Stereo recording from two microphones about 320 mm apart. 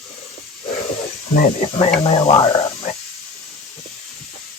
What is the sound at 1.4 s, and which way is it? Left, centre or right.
Speech, centre.